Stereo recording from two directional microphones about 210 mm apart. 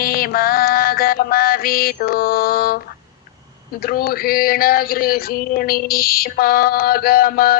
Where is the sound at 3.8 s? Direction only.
45° left (ahead or behind).